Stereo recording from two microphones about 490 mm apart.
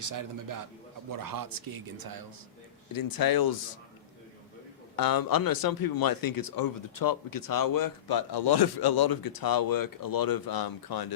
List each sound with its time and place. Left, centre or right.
0.0 s a man's voice: right
2.9 s speech: left
4.9 s speech: left